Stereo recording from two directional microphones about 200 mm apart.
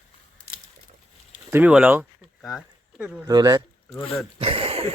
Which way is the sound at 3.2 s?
20° right (ahead or behind).